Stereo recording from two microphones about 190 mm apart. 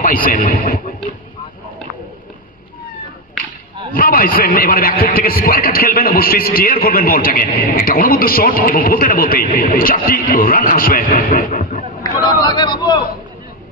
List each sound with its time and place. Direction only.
0.0 s speech: 45° left (ahead or behind)
3.9 s a man's voice: 50° left (ahead or behind)
12.0 s a man's voice: 25° left (ahead or behind)